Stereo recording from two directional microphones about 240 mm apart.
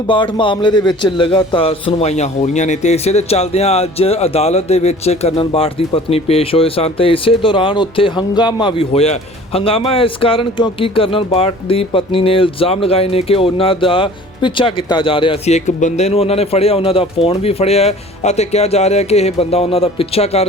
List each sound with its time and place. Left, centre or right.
0.1 s a man's voice: centre